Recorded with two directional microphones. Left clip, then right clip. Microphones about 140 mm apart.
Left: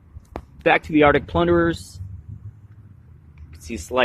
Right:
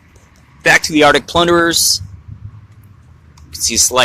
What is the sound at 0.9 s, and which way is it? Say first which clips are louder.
Speech: right 6 dB; 20° right (ahead or behind).